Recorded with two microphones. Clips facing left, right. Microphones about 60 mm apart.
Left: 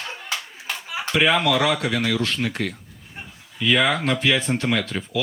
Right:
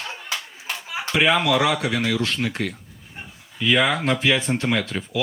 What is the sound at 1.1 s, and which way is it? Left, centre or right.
Speech, centre.